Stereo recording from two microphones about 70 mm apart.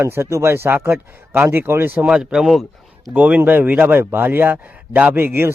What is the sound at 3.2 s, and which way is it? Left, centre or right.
A man's voice, right.